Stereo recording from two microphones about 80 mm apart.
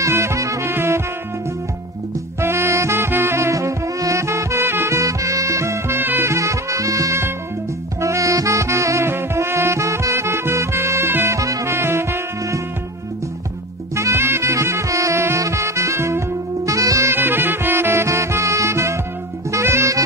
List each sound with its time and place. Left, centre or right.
0.0 s music: right
2.4 s music: right
11.3 s music: right
13.9 s music: right
17.1 s music: right